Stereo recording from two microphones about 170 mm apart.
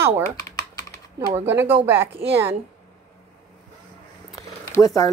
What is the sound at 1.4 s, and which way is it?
Speech, 15° right (ahead or behind).